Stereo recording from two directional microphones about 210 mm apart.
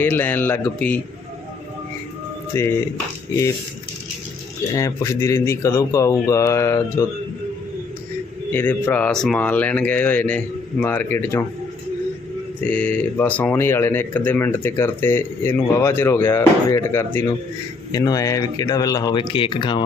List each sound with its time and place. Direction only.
0.0 s speech: 10° left (ahead or behind)
2.5 s speech: 15° left (ahead or behind)
4.7 s speech: 15° left (ahead or behind)
8.5 s speech: 10° left (ahead or behind)
12.6 s speech: 5° left (ahead or behind); by 19.8 s 20° left (ahead or behind)